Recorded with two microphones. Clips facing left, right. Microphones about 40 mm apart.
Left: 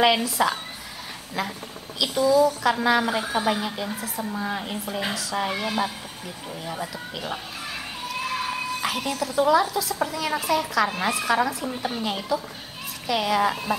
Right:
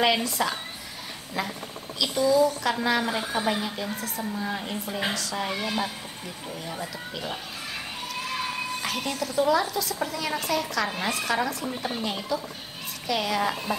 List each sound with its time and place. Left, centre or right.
0.0 s a woman's voice: centre
2.0 s a woman's voice: centre
8.3 s a sound: centre
9.5 s a woman's voice: centre